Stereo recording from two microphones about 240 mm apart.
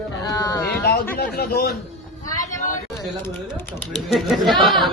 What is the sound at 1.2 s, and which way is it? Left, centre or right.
Speech, left.